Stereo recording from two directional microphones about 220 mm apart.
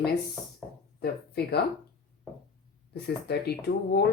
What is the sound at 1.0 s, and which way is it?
Speech, 45° left (ahead or behind).